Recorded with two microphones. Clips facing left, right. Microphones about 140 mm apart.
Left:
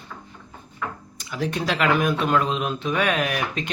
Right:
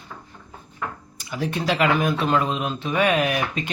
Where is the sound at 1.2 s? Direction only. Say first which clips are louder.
Right 1 dB; 5° right (ahead or behind).